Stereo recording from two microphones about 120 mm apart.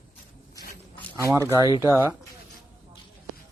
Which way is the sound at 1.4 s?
25° right (ahead or behind).